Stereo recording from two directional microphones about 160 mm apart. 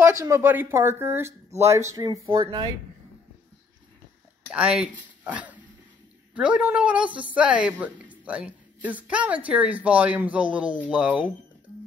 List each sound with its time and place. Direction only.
0.0 s a woman's voice: 15° right (ahead or behind)
4.5 s a woman's voice: 5° right (ahead or behind)
5.2 s dog: 10° right (ahead or behind)
6.3 s a woman's voice: 5° right (ahead or behind)